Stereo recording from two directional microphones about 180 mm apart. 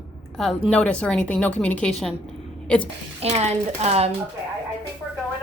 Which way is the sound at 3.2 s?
35° right (ahead or behind).